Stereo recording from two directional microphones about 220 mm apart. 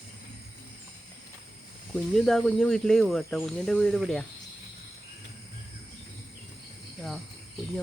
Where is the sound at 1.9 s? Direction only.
Centre (ahead or behind).